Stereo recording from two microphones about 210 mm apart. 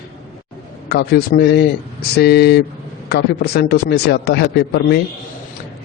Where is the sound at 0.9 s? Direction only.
50° left (ahead or behind).